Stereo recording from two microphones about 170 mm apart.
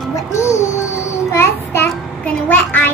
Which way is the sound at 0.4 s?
15° left (ahead or behind).